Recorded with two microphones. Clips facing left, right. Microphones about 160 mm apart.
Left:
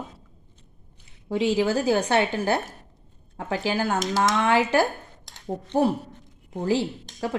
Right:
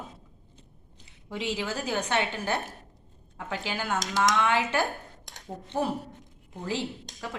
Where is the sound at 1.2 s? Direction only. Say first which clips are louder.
Left 10 dB; 35° left (ahead or behind).